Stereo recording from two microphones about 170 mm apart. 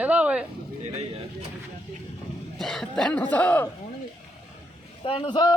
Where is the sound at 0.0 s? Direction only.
10° right (ahead or behind).